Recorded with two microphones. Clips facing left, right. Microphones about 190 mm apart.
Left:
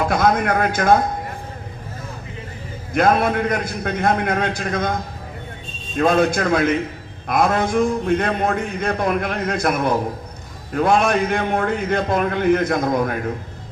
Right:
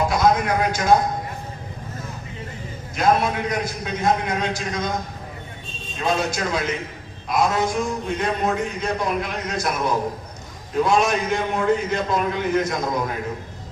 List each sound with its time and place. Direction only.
0.1 s a man's voice: 55° left (ahead or behind)
2.9 s a man's voice: 55° left (ahead or behind)
6.0 s a man's voice: 55° left (ahead or behind)